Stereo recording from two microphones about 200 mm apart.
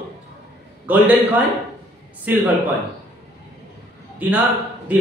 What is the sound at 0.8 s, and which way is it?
A man's voice, 10° right (ahead or behind).